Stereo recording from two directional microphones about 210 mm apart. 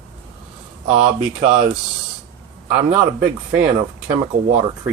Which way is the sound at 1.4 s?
40° right (ahead or behind).